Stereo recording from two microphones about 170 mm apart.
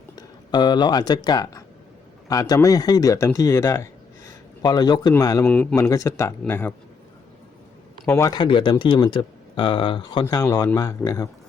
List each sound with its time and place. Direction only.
0.2 s speech: 25° left (ahead or behind)
8.0 s speech: 15° left (ahead or behind)